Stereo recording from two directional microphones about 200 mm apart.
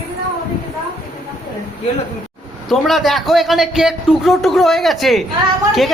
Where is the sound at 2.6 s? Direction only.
Centre (ahead or behind).